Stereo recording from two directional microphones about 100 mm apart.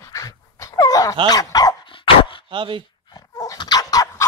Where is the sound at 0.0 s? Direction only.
35° left (ahead or behind).